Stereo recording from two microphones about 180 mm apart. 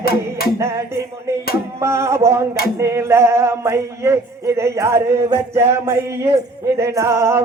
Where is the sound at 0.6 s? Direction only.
15° right (ahead or behind).